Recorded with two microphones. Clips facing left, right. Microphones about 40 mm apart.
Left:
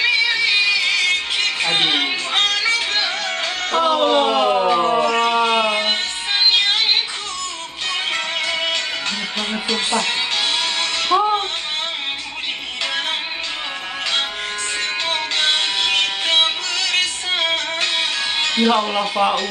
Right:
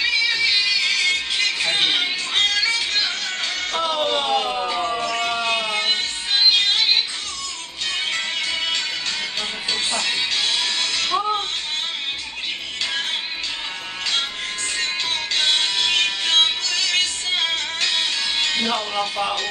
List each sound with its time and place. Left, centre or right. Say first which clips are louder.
0.0 s music: left 3 dB; left
3.7 s siren: left 7 dB; left
8.1 s music: left 3 dB; left
9.7 s speech: left 4 dB; left
10.3 s music: left 2 dB; left
17.3 s music: left 3 dB; left
18.5 s speech: left 6 dB; left